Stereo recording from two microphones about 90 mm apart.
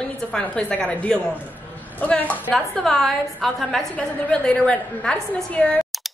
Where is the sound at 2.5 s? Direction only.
5° left (ahead or behind).